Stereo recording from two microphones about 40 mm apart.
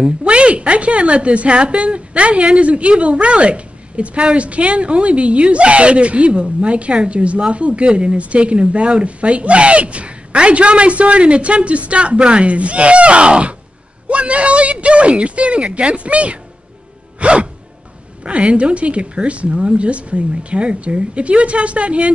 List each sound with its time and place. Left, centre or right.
0.2 s a woman's voice: right
17.2 s music: right
18.2 s a woman's voice: right